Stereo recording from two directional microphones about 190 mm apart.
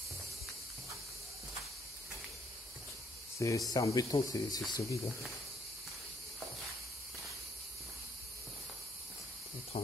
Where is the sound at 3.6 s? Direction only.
20° left (ahead or behind).